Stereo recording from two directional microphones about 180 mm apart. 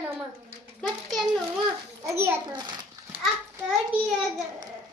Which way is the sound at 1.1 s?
Centre (ahead or behind).